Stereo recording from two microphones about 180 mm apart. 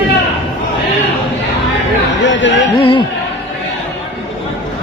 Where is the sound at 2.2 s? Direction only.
90° left.